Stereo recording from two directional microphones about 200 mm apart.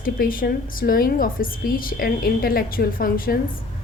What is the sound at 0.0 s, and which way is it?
A woman's voice, 45° left (ahead or behind).